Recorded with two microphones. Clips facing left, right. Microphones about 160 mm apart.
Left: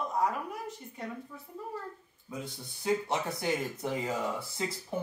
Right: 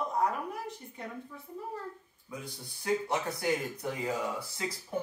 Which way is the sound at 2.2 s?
25° left (ahead or behind).